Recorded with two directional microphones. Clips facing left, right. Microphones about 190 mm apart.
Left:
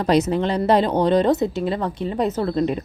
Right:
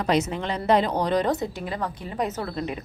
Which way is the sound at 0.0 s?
35° left (ahead or behind).